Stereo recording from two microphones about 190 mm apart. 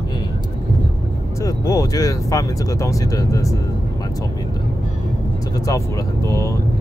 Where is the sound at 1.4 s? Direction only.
20° left (ahead or behind).